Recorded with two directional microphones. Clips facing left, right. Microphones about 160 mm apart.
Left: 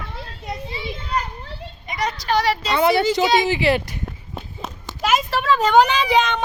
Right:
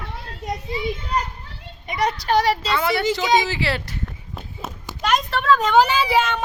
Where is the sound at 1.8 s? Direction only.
60° right (ahead or behind); by 2.7 s 45° right (ahead or behind).